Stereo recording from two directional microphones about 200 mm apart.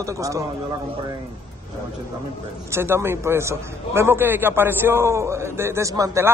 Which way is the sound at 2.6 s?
15° right (ahead or behind).